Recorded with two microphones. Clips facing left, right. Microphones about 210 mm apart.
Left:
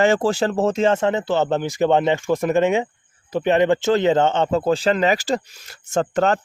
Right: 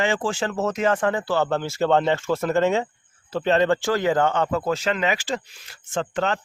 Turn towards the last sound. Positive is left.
turn(degrees=40)  # may be behind; listen again after turning